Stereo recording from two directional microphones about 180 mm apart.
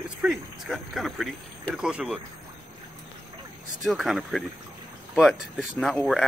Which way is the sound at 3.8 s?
Centre (ahead or behind).